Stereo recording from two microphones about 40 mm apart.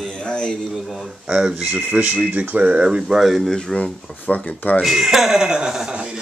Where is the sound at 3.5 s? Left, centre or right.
Centre.